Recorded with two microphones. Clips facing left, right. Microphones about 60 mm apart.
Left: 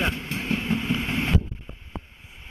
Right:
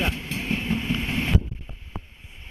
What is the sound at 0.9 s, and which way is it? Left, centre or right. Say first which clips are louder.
Boat: left 1 dB; left.